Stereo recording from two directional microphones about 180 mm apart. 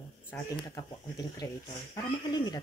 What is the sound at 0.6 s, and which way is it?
Speech, 20° left (ahead or behind).